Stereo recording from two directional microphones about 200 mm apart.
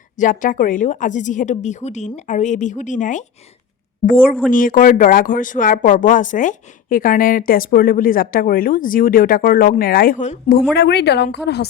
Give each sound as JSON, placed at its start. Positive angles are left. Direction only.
{"t": 0.2, "sound": "a woman's voice", "side_deg": 40}
{"t": 10.8, "sound": "speech", "side_deg": 55}